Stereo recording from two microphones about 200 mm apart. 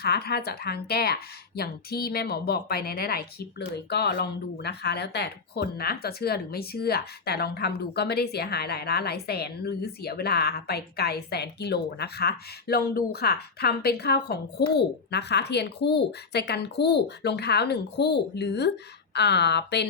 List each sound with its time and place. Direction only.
0.0 s a woman's voice: 50° left (ahead or behind)